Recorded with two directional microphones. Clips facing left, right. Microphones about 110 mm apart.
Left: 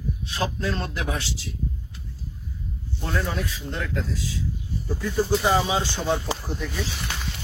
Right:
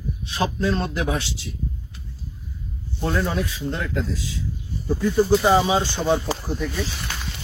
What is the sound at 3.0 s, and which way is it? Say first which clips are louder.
A man's voice: right 4 dB; 20° right (ahead or behind).